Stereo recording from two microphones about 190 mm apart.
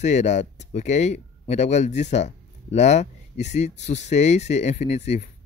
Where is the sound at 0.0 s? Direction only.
35° left (ahead or behind).